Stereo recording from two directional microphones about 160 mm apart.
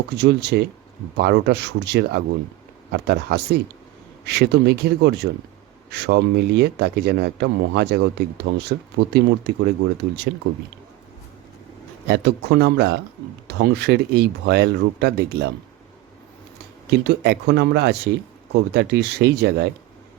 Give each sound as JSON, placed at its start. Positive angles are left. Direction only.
{"t": 0.2, "sound": "speech", "side_deg": -90}
{"t": 12.0, "sound": "speech", "side_deg": -90}
{"t": 16.9, "sound": "speech", "side_deg": -90}